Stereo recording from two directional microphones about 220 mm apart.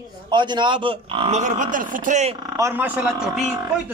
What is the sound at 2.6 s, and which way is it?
Speech, 10° right (ahead or behind).